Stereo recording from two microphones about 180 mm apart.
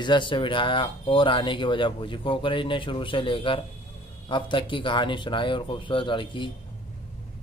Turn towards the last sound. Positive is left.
turn(degrees=25)  # may be behind; listen again after turning